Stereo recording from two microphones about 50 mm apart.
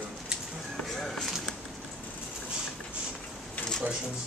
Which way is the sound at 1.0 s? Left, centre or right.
Centre.